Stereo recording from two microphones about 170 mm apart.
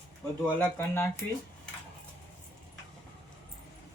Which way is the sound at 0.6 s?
10° left (ahead or behind).